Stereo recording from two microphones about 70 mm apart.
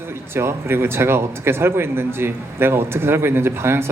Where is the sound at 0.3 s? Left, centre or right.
Right.